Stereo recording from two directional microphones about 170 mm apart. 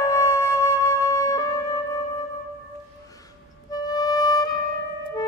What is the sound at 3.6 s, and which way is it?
Music, 20° left (ahead or behind).